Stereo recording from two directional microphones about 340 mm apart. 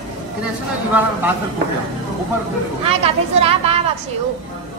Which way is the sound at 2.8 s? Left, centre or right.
Centre.